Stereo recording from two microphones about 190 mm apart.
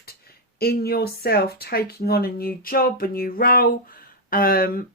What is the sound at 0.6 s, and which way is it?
Speech, 55° left (ahead or behind).